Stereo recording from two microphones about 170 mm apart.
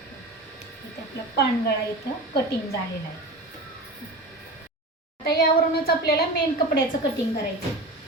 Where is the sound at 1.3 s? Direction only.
70° left (ahead or behind).